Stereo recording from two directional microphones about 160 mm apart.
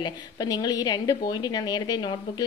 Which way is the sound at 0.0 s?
25° left (ahead or behind).